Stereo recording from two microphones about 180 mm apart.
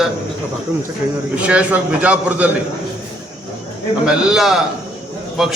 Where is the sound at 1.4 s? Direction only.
5° right (ahead or behind).